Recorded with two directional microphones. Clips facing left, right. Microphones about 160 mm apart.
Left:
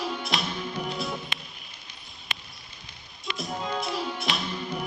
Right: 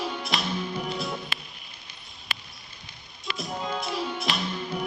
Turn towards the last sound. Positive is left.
turn(degrees=0)  # may be behind; listen again after turning